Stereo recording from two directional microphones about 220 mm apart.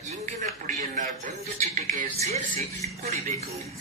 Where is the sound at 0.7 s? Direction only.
35° right (ahead or behind).